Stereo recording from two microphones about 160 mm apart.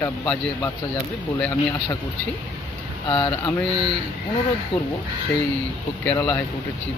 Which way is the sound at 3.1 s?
30° left (ahead or behind).